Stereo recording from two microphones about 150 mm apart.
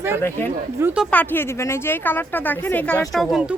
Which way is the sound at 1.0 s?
10° left (ahead or behind).